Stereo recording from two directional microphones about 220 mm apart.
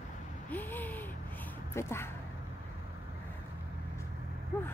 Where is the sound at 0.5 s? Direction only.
10° left (ahead or behind).